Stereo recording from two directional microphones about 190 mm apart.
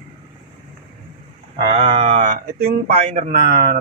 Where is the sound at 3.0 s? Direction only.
35° right (ahead or behind).